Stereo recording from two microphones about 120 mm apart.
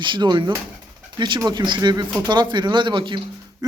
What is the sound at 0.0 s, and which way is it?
A man's voice, 40° right (ahead or behind).